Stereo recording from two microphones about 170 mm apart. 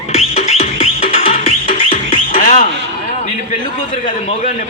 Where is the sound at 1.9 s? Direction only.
50° left (ahead or behind).